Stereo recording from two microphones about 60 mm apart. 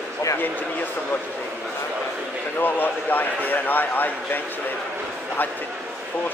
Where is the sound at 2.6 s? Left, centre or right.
Left.